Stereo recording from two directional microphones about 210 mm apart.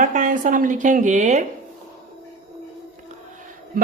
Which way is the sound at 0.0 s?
40° right (ahead or behind).